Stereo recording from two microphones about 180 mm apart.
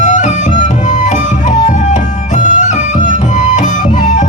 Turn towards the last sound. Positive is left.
turn(degrees=45)  # may be behind; listen again after turning